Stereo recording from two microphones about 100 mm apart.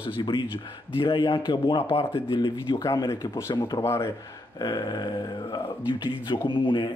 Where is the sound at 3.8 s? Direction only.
25° left (ahead or behind).